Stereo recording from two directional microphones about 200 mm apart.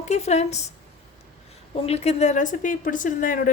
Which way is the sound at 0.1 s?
35° left (ahead or behind).